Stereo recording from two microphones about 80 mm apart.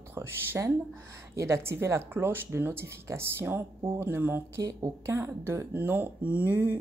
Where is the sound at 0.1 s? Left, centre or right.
Right.